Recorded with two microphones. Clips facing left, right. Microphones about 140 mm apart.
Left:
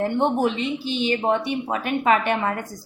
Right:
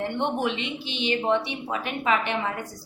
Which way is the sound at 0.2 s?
40° left (ahead or behind).